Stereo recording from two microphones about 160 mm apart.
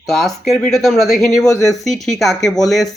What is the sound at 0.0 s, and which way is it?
Speech, centre (ahead or behind).